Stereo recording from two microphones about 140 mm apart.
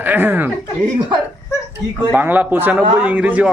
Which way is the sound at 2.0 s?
15° right (ahead or behind).